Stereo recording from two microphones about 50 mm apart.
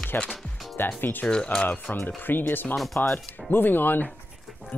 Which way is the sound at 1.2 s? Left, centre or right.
Centre.